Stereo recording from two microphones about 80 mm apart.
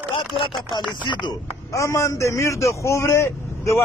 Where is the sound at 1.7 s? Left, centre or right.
Left.